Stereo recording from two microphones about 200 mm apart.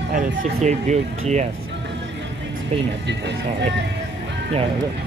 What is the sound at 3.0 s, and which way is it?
Speech, 60° right (ahead or behind).